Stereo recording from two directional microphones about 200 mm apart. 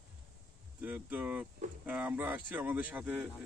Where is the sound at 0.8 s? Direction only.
10° right (ahead or behind).